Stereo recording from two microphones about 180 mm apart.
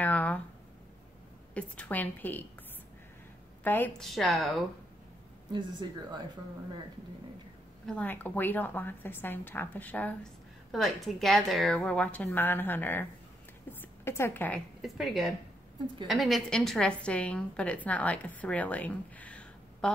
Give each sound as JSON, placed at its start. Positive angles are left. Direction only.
{"t": 0.0, "sound": "a sound", "side_deg": 10}
{"t": 1.5, "sound": "a woman's voice", "side_deg": 5}
{"t": 3.6, "sound": "a woman's voice", "side_deg": 10}
{"t": 5.5, "sound": "speech", "side_deg": -25}
{"t": 7.8, "sound": "a woman's voice", "side_deg": 5}
{"t": 14.8, "sound": "a woman's voice", "side_deg": 0}